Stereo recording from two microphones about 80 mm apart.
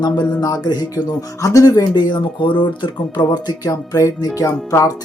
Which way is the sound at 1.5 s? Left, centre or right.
Left.